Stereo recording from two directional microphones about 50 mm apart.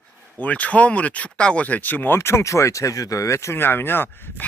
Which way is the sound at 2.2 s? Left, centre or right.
Left.